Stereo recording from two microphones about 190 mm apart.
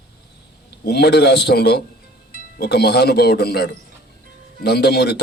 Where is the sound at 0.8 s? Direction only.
60° left (ahead or behind).